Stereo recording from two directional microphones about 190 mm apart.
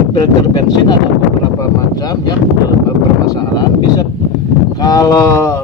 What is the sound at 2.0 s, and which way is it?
Speech, 20° left (ahead or behind).